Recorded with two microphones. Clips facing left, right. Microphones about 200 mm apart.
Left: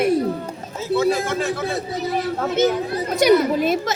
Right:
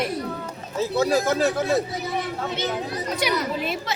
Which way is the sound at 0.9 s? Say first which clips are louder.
Left 2 dB; 40° right (ahead or behind).